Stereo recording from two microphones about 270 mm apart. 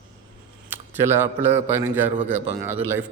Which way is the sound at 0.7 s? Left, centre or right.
Centre.